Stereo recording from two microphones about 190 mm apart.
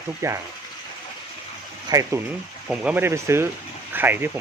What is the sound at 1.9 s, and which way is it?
Speech, 15° right (ahead or behind).